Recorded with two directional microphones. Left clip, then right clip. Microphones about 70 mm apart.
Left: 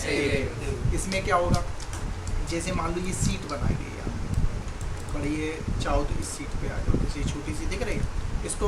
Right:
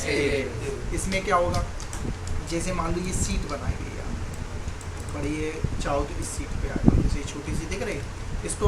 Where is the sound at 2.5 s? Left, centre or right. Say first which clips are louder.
Right 1 dB; centre.